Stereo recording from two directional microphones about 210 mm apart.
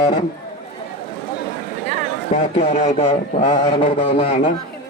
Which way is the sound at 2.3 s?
30° left (ahead or behind).